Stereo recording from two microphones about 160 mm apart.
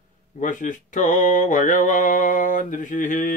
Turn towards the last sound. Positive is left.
turn(degrees=55)  # may be behind; listen again after turning